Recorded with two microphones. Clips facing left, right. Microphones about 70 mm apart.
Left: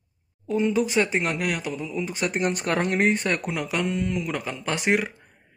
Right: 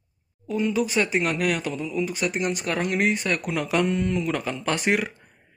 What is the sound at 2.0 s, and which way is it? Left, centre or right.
Speech, left.